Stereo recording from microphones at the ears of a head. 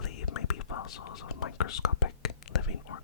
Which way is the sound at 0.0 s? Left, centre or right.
Left.